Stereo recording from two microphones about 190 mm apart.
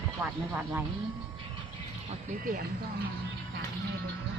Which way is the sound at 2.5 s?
45° right (ahead or behind).